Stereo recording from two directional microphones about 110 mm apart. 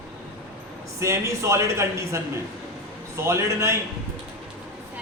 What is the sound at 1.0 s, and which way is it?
Speech, 25° right (ahead or behind).